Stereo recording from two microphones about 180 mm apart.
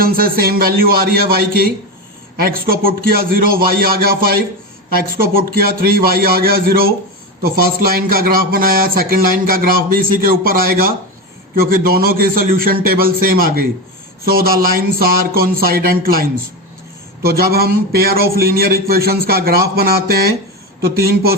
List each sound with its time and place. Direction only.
0.0 s a man's voice: 55° right (ahead or behind)